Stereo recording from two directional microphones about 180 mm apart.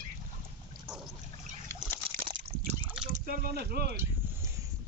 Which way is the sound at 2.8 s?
10° right (ahead or behind).